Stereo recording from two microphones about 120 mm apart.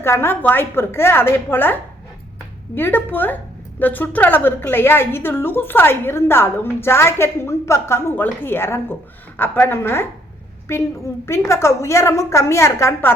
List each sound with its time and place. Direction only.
0.0 s a woman's voice: 20° left (ahead or behind)